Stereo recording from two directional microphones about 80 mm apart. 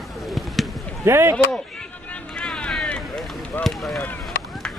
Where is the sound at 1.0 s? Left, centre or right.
Right.